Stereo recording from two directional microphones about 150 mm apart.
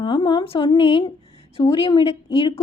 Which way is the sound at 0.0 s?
35° left (ahead or behind).